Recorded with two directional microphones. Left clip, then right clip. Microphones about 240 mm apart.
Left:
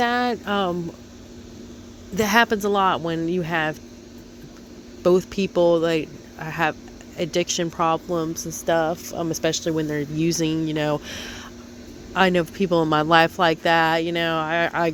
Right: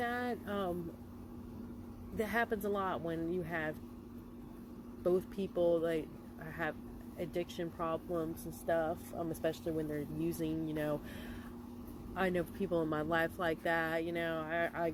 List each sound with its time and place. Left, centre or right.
0.0 s a sound: left
2.1 s speech: left
5.0 s speech: left